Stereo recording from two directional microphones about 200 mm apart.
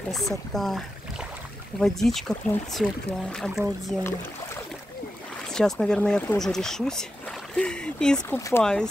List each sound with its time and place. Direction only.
0.1 s speech: centre (ahead or behind)
5.5 s speech: centre (ahead or behind)
8.4 s speech: 15° left (ahead or behind)